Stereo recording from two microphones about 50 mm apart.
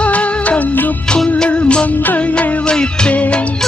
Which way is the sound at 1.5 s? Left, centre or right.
Left.